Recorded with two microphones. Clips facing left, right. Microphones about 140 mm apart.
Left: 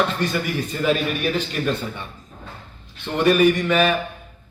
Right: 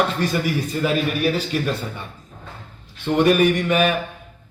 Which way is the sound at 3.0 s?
10° right (ahead or behind).